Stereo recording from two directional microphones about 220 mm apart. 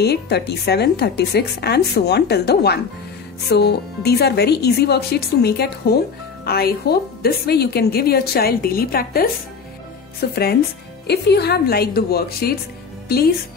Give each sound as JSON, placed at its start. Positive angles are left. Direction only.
{"t": 0.0, "sound": "a woman's voice", "side_deg": 50}
{"t": 10.3, "sound": "a woman's voice", "side_deg": 45}